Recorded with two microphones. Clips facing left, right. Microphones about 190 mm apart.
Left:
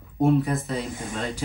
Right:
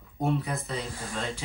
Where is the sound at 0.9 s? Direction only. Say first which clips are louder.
Left 5 dB; 20° left (ahead or behind).